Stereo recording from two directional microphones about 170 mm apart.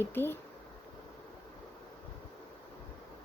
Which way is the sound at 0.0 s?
15° left (ahead or behind).